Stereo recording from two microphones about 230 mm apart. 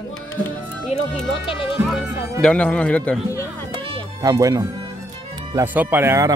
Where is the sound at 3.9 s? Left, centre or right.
Centre.